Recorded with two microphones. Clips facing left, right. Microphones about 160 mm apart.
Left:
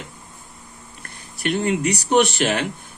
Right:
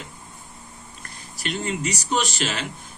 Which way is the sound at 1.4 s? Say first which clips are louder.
Left 7 dB; 60° left (ahead or behind).